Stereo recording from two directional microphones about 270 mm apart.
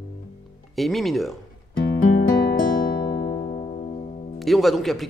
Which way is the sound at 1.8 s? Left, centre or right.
Left.